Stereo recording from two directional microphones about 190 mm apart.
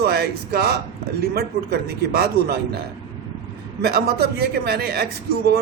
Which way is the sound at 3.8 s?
55° right (ahead or behind).